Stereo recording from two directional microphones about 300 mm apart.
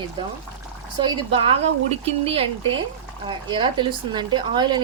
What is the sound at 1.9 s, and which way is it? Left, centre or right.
Speech, centre.